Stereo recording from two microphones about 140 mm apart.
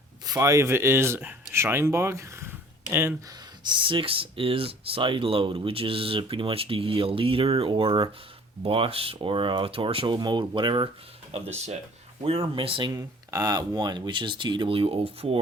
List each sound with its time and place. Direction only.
0.3 s speech: 20° right (ahead or behind)
3.6 s speech: 35° right (ahead or behind)
11.3 s speech: 50° right (ahead or behind)
12.9 s speech: 25° right (ahead or behind); by 15.4 s 45° right (ahead or behind)